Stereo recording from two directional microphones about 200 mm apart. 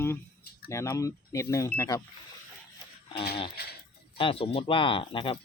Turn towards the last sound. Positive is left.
turn(degrees=25)  # may be behind; listen again after turning